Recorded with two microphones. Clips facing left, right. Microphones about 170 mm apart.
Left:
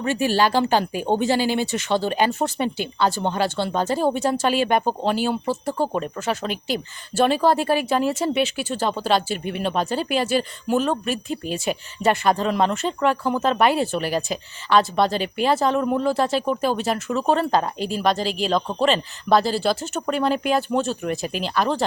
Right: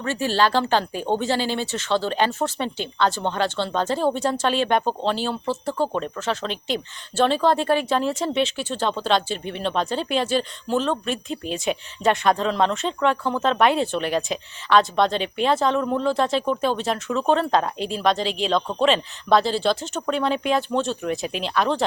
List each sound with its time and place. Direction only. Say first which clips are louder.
0.0 s speech: left 2 dB; 15° left (ahead or behind)